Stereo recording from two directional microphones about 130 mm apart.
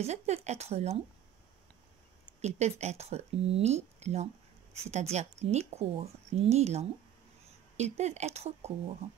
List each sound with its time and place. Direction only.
0.0 s a woman's voice: 55° right (ahead or behind)
2.4 s a woman's voice: 60° right (ahead or behind)